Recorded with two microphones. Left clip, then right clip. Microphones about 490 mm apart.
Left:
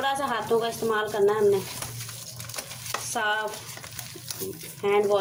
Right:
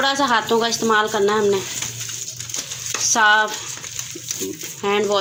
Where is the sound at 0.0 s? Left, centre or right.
Left.